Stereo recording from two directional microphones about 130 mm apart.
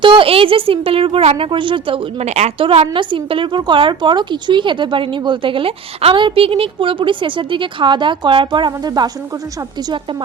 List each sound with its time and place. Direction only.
0.0 s a woman's voice: 40° right (ahead or behind)
2.2 s a woman's voice: 60° right (ahead or behind)
2.6 s a woman's voice: 45° right (ahead or behind)